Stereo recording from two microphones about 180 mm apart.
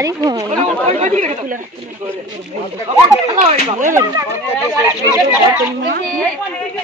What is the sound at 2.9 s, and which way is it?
Speech, 35° right (ahead or behind).